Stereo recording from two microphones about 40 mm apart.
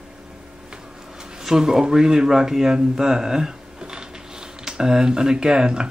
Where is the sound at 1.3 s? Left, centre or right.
Centre.